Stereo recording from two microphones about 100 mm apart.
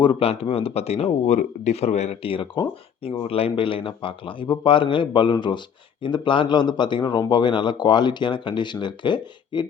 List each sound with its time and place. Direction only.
0.0 s speech: 60° left (ahead or behind)